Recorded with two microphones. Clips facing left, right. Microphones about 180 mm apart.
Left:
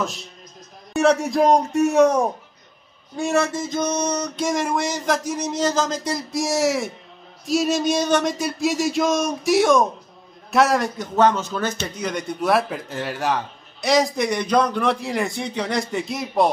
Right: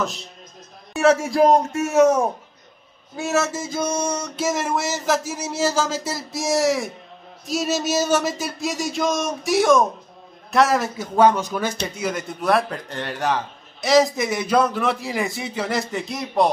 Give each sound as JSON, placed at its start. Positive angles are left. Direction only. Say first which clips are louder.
{"t": 0.0, "sound": "speech", "louder": "right 1 dB", "side_deg": 0}